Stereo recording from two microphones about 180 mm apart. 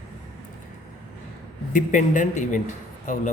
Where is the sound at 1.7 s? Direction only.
45° left (ahead or behind).